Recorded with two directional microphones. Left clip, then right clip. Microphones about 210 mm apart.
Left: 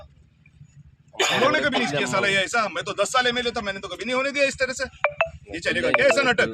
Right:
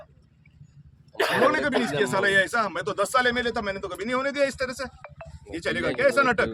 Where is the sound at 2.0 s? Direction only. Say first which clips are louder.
Right 2 dB; 15° right (ahead or behind).